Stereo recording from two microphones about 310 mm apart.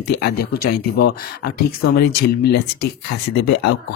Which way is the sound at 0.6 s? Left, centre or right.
Left.